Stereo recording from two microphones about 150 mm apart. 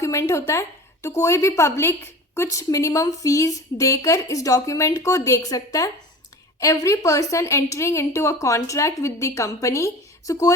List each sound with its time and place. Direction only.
0.0 s a woman's voice: 20° left (ahead or behind)